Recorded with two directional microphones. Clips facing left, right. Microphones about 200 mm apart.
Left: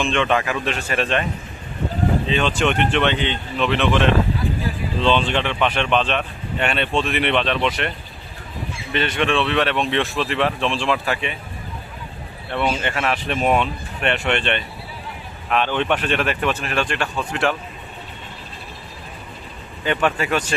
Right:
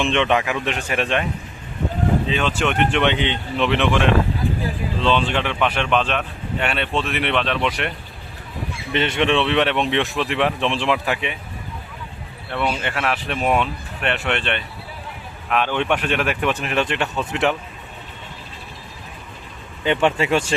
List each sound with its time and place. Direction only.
0.0 s speech: 20° right (ahead or behind)
2.2 s speech: 5° right (ahead or behind)
3.0 s speech: 15° right (ahead or behind)
5.0 s speech: 5° right (ahead or behind)
8.9 s speech: 25° right (ahead or behind)
12.5 s speech: centre (ahead or behind); by 17.6 s 20° right (ahead or behind)
19.8 s speech: 25° right (ahead or behind)